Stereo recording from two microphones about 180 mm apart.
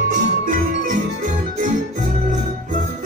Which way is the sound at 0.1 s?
45° right (ahead or behind).